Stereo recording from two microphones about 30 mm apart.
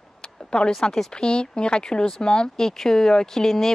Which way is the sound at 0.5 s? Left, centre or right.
Left.